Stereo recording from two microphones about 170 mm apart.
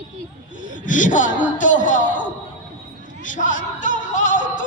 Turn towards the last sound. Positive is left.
turn(degrees=50)  # may be behind; listen again after turning